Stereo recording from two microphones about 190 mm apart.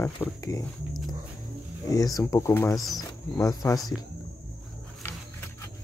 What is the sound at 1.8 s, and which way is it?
Speech, 20° left (ahead or behind).